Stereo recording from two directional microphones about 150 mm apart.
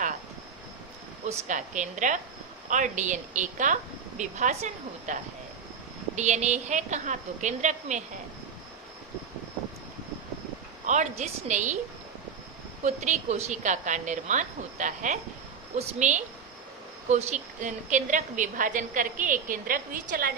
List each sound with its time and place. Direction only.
1.5 s a woman's voice: 55° right (ahead or behind)
6.1 s a woman's voice: 50° right (ahead or behind)
10.8 s a woman's voice: 55° right (ahead or behind)
12.8 s a woman's voice: 50° right (ahead or behind); by 20.3 s 70° right (ahead or behind)